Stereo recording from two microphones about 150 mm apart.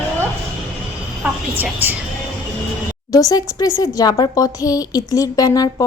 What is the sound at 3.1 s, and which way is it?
A woman's voice, 25° left (ahead or behind).